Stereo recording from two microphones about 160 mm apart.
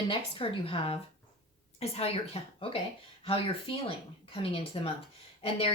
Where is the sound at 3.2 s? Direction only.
35° left (ahead or behind).